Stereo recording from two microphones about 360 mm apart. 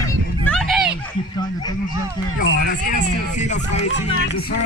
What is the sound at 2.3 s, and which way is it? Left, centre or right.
Speech, left.